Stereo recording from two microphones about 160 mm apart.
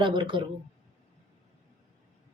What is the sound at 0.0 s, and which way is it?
Speech, 30° right (ahead or behind).